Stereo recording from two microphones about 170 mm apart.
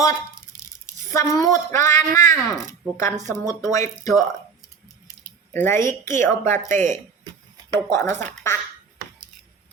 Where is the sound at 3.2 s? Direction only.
20° left (ahead or behind).